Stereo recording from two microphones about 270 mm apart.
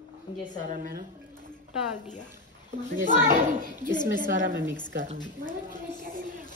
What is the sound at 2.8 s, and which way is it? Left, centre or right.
Speech, right.